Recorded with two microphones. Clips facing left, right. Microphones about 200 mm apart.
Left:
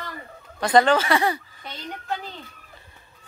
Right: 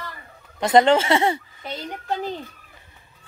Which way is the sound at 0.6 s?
25° right (ahead or behind).